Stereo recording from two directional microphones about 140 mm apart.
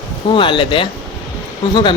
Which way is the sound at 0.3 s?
35° left (ahead or behind).